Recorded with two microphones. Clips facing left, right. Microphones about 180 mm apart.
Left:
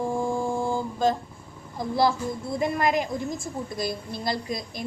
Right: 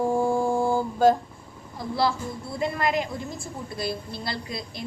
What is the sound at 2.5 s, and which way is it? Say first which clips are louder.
A woman's voice: left 1 dB; 45° left (ahead or behind).